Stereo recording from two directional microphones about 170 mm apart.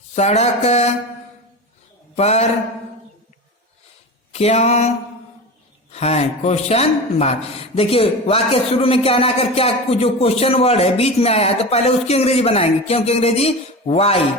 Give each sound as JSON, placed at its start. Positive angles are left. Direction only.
{"t": 0.2, "sound": "speech", "side_deg": 40}
{"t": 2.1, "sound": "speech", "side_deg": 40}
{"t": 4.3, "sound": "speech", "side_deg": 40}
{"t": 5.9, "sound": "speech", "side_deg": 40}